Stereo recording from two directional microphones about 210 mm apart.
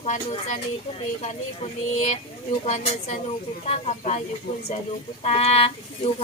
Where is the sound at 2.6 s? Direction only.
30° left (ahead or behind).